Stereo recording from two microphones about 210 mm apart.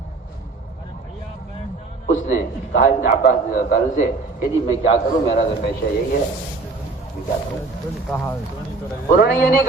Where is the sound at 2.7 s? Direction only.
50° left (ahead or behind).